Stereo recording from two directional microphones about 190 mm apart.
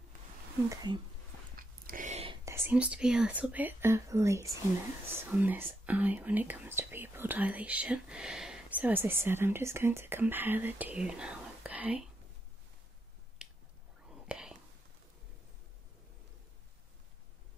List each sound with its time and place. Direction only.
0.7 s speech: 25° right (ahead or behind)
1.6 s a sound: 45° right (ahead or behind)
2.4 s speech: 10° right (ahead or behind)
13.4 s finger snapping: 5° right (ahead or behind)
14.2 s whispering: 5° right (ahead or behind)